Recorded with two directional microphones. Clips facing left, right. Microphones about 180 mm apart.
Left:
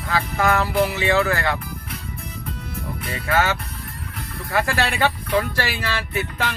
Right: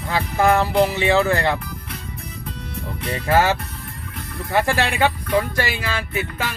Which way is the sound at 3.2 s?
35° right (ahead or behind).